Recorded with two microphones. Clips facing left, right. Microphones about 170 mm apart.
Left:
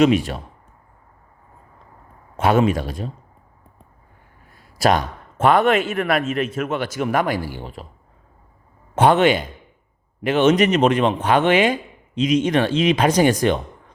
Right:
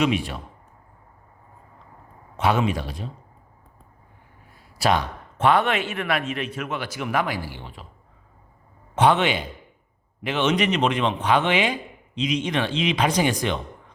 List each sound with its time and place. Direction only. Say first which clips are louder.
0.0 s speech: left 7 dB; 45° left (ahead or behind)
2.3 s speech: left 5 dB; 50° left (ahead or behind)
4.8 s speech: left 4 dB; 45° left (ahead or behind)
9.0 s speech: left 4 dB; 45° left (ahead or behind)